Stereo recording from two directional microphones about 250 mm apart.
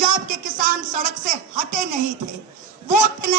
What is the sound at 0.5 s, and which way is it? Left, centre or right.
Speech, right.